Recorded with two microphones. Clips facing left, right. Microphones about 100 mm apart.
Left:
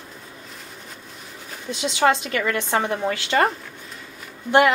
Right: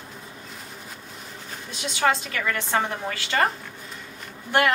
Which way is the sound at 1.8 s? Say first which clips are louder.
Left 4 dB; 20° left (ahead or behind).